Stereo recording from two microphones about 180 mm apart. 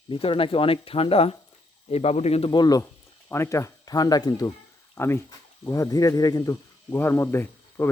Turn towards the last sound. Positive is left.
turn(degrees=10)  # may be behind; listen again after turning